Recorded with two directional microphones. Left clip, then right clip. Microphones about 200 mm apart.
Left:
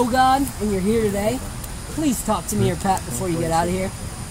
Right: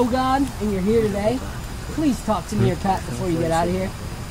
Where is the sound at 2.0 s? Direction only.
5° left (ahead or behind).